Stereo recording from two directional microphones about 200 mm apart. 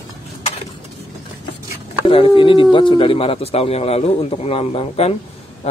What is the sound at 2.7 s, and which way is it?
A man's voice, 25° left (ahead or behind).